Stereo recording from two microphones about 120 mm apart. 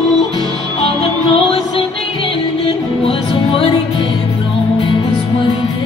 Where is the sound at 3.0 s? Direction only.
45° left (ahead or behind).